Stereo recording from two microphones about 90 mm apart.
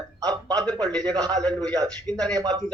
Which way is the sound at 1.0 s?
50° right (ahead or behind).